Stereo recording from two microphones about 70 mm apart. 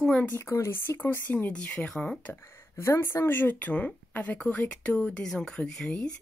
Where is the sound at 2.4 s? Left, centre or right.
Left; by 6.1 s centre.